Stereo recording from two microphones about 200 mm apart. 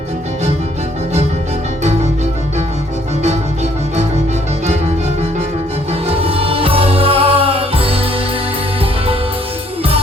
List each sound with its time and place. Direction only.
6.1 s music: 30° right (ahead or behind)